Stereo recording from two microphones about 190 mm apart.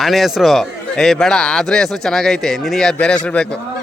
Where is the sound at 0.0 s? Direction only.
Centre (ahead or behind).